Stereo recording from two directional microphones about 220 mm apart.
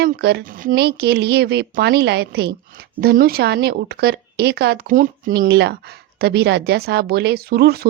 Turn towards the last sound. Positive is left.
turn(degrees=-45)  # may be behind; listen again after turning